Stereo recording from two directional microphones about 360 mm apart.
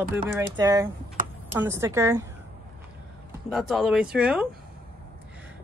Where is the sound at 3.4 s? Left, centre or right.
Centre.